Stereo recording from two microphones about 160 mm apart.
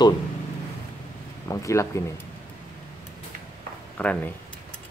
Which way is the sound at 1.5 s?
20° left (ahead or behind).